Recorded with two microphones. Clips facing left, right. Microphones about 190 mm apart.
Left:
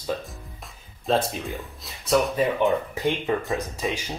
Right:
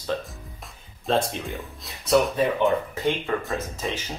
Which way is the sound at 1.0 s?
Centre (ahead or behind).